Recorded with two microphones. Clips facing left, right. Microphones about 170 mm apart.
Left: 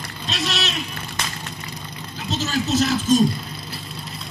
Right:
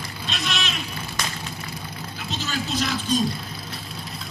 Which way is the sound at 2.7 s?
40° left (ahead or behind).